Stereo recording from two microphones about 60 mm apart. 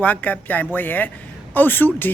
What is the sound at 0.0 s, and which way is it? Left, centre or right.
Speech, left.